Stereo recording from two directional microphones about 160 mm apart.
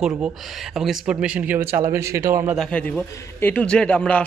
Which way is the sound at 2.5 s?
5° left (ahead or behind).